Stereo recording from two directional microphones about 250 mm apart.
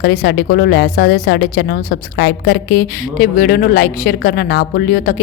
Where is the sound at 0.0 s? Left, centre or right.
Left.